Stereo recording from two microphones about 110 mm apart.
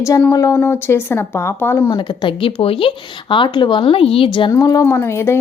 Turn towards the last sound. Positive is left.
turn(degrees=25)  # may be behind; listen again after turning